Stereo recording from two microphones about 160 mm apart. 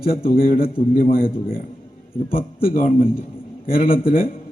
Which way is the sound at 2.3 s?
65° left (ahead or behind).